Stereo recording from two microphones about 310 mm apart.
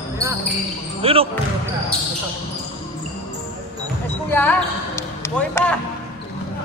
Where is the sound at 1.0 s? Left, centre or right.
Centre.